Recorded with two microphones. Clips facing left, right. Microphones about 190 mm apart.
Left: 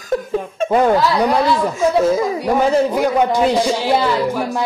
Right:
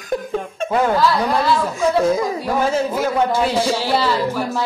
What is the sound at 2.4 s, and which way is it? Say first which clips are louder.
Speech: left 6 dB; 15° left (ahead or behind).